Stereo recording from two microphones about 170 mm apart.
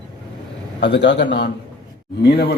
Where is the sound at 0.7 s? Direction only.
90° left.